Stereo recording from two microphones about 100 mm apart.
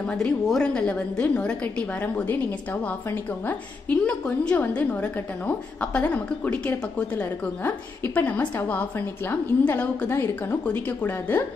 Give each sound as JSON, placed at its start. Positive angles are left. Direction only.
{"t": 0.0, "sound": "a woman's voice", "side_deg": 5}